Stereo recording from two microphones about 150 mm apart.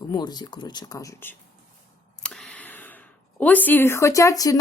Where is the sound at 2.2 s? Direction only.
5° left (ahead or behind); by 4.6 s 20° left (ahead or behind).